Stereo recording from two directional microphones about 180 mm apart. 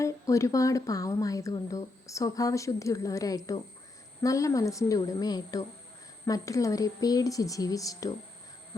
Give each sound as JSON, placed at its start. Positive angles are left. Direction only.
{"t": 0.0, "sound": "speech", "side_deg": 15}